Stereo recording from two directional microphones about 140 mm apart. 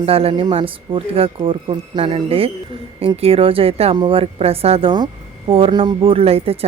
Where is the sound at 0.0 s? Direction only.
45° right (ahead or behind).